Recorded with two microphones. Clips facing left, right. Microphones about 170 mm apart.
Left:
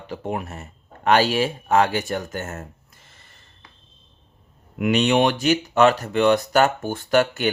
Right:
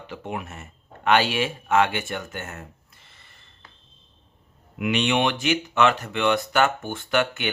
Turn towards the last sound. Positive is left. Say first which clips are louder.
# left 5 dB
turn(degrees=40)  # may be behind; listen again after turning